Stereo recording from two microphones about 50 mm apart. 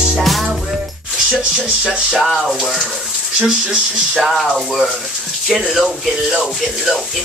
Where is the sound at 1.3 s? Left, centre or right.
Centre.